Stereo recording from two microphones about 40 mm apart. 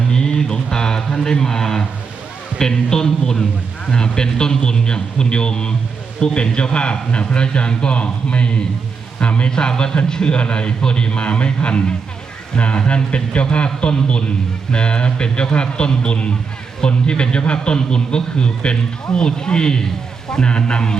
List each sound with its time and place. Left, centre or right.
0.1 s a sound: centre
0.7 s speech: centre
2.6 s music: centre
3.9 s a man's voice: centre